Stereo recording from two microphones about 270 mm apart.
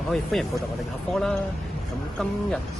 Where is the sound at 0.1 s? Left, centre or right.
Centre.